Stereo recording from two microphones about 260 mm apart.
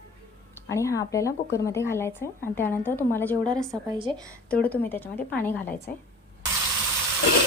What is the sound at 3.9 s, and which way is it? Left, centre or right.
Speech, centre.